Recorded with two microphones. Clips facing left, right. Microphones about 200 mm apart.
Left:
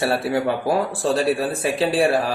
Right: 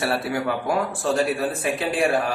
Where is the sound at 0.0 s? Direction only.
30° left (ahead or behind).